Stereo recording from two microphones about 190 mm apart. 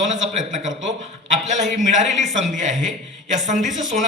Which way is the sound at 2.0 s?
40° right (ahead or behind).